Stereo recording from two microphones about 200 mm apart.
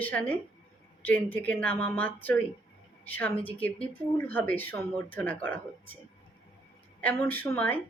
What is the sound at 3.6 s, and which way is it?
Speech, 10° left (ahead or behind).